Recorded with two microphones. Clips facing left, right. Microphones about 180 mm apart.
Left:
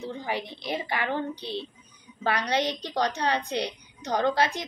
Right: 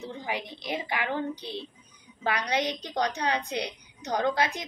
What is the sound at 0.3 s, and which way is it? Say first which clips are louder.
A woman's voice: left 1 dB; 15° right (ahead or behind).